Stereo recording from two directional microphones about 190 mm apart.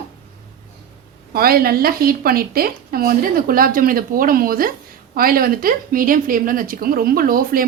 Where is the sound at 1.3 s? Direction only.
50° right (ahead or behind).